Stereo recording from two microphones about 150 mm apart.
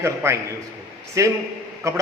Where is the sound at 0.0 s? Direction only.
15° right (ahead or behind).